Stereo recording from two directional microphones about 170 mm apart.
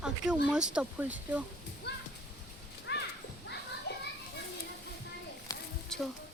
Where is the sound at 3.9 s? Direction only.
80° left.